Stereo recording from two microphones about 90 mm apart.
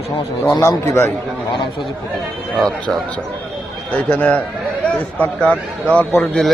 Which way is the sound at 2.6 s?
5° left (ahead or behind).